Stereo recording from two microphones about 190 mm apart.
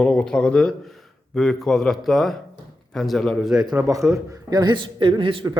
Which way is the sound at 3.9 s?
15° right (ahead or behind).